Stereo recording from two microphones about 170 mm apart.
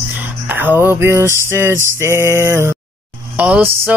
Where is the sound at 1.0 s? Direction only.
15° right (ahead or behind).